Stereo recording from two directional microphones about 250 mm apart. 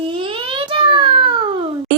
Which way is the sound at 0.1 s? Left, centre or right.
Centre.